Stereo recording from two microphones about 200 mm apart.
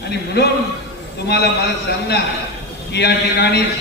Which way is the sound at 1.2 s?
55° left (ahead or behind).